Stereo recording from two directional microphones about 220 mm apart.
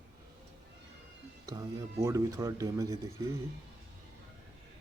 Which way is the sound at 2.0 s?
15° right (ahead or behind).